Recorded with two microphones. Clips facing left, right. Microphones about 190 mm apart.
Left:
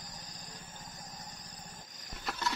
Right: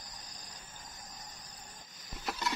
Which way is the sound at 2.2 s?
10° right (ahead or behind).